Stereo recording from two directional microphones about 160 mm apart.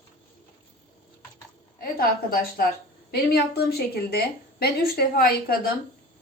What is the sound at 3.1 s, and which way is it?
A woman's voice, 85° left.